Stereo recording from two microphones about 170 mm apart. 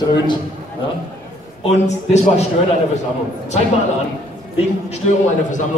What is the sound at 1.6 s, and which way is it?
Speech, 40° left (ahead or behind).